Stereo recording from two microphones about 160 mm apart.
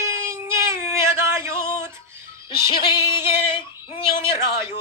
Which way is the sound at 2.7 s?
30° left (ahead or behind).